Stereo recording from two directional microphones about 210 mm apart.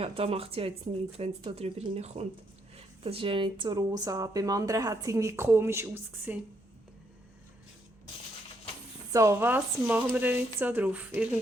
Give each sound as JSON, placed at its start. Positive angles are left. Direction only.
{"t": 0.0, "sound": "speech", "side_deg": -25}
{"t": 9.1, "sound": "speech", "side_deg": -15}